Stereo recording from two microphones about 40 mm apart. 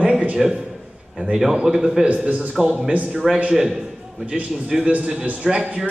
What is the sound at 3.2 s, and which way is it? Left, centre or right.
A man's voice, centre.